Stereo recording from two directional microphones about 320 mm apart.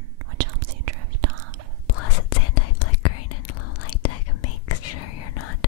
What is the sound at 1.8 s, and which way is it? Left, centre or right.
Whispering, left.